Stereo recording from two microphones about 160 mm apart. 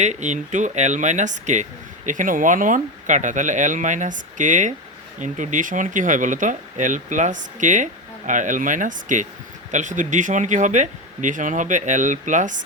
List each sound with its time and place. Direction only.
0.0 s speech: 45° right (ahead or behind)